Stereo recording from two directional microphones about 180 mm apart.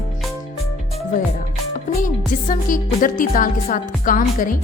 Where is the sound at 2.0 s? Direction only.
45° left (ahead or behind).